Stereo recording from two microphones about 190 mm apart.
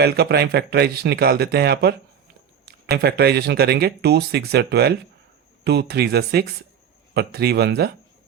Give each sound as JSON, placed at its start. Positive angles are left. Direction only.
{"t": 0.0, "sound": "speech", "side_deg": -60}